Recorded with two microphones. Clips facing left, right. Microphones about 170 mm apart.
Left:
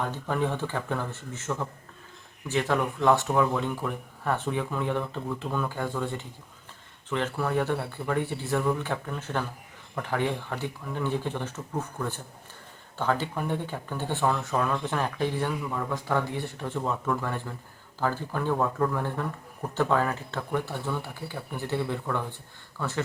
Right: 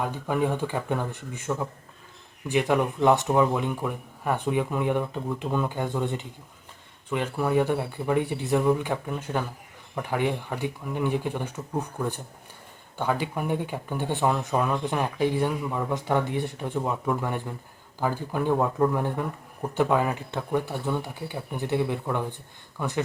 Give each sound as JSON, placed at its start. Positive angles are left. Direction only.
{"t": 0.0, "sound": "speech", "side_deg": -10}